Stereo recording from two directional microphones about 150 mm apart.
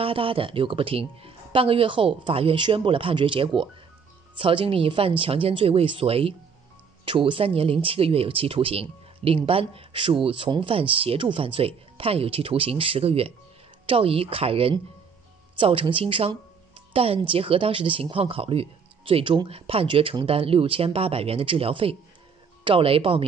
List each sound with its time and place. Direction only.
0.0 s speech: 35° right (ahead or behind)